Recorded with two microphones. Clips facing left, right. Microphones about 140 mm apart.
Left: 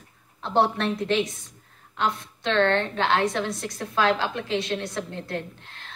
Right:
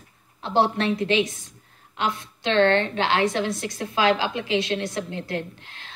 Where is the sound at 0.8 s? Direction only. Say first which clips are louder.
Right 2 dB; 90° right.